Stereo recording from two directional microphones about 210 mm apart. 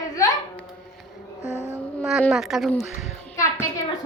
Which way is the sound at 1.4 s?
30° right (ahead or behind).